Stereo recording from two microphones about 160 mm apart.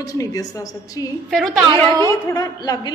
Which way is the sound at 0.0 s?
20° left (ahead or behind).